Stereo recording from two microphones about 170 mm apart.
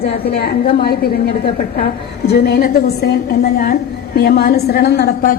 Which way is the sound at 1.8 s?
70° left (ahead or behind).